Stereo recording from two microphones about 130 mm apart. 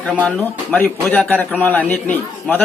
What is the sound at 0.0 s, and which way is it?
A man's voice, 10° left (ahead or behind).